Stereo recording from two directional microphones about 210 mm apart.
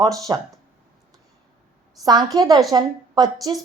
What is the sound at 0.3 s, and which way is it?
Speech, 20° right (ahead or behind).